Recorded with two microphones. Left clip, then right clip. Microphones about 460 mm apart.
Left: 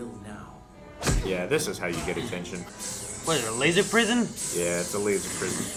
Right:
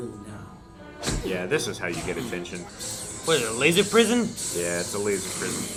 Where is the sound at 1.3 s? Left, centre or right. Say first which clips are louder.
Right 1 dB; left.